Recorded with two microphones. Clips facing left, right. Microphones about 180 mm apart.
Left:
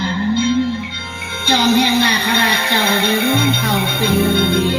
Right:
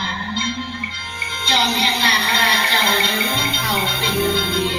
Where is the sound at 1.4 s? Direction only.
50° left (ahead or behind).